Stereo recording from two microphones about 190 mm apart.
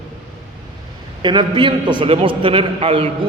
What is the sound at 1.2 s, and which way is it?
A man's voice, 25° right (ahead or behind).